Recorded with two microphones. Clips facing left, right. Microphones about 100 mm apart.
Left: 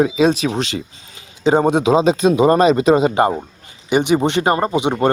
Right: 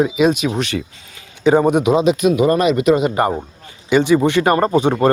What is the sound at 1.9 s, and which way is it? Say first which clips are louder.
Speech: left 1 dB; 30° left (ahead or behind).